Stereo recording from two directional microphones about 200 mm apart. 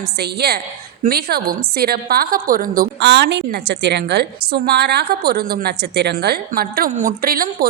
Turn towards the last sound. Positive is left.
turn(degrees=-45)  # may be behind; listen again after turning